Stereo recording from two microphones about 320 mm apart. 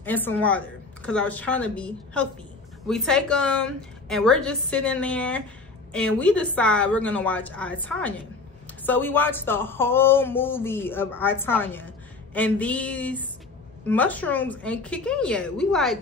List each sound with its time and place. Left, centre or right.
0.0 s a woman's voice: centre